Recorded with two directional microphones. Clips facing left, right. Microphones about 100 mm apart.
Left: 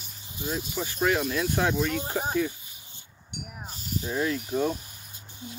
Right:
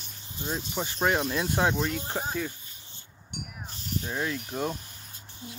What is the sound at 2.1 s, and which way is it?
Snake, 10° left (ahead or behind).